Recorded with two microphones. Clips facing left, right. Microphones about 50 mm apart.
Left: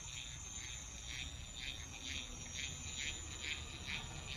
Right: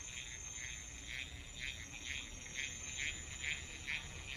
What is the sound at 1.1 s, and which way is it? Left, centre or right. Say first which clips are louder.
Frog: right 3 dB; right.